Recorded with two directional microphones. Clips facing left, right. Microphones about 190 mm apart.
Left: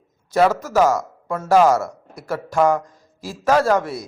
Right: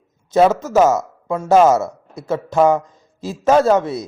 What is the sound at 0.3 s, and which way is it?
A man's voice, 20° right (ahead or behind).